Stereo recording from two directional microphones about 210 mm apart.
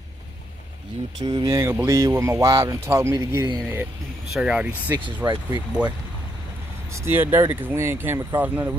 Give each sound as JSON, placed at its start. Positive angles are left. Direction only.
{"t": 1.2, "sound": "speech", "side_deg": -20}
{"t": 4.3, "sound": "speech", "side_deg": -5}
{"t": 5.2, "sound": "speech", "side_deg": -20}
{"t": 6.9, "sound": "speech", "side_deg": -10}